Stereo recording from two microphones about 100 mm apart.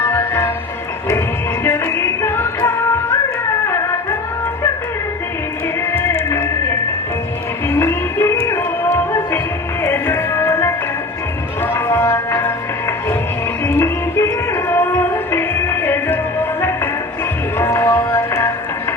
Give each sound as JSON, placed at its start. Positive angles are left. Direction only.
{"t": 0.0, "sound": "music", "side_deg": 25}
{"t": 1.6, "sound": "music", "side_deg": 25}
{"t": 5.9, "sound": "music", "side_deg": 25}
{"t": 9.8, "sound": "music", "side_deg": 25}
{"t": 13.7, "sound": "music", "side_deg": 25}